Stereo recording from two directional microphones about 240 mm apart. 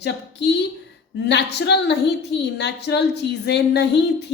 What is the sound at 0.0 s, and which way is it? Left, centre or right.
A woman's voice, left.